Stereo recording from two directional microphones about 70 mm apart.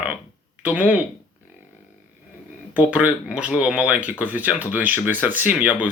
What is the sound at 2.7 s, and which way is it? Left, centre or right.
Speech, centre.